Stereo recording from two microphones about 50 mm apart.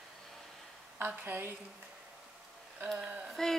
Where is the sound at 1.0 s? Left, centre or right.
Right.